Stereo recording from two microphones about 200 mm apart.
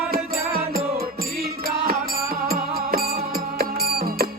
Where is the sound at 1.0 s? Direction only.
50° right (ahead or behind).